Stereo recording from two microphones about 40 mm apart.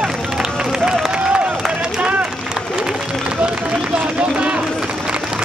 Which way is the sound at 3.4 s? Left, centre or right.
Right.